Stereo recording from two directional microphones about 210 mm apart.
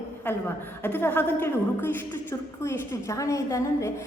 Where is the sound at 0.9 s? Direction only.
10° left (ahead or behind).